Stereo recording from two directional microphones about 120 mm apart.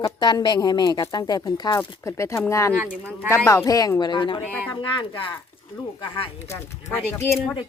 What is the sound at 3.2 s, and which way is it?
A woman's voice, 20° left (ahead or behind).